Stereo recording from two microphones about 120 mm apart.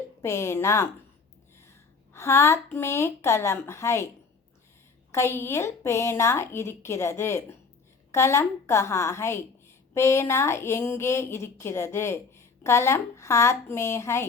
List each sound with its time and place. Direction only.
0.2 s a woman's voice: 20° left (ahead or behind)
2.1 s a woman's voice: 20° left (ahead or behind)
5.1 s a woman's voice: 25° left (ahead or behind)